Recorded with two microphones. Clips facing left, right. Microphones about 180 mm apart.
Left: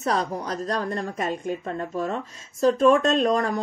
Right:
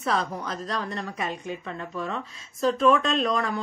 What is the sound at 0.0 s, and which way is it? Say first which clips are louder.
Speech: left 2 dB; 45° left (ahead or behind).